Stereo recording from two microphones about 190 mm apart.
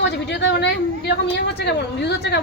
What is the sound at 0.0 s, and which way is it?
A woman's voice, 70° left (ahead or behind).